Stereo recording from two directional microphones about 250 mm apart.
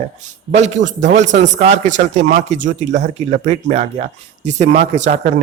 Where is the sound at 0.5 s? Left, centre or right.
Right.